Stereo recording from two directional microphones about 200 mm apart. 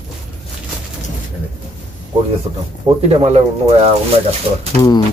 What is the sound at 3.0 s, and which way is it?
Speech, 30° right (ahead or behind).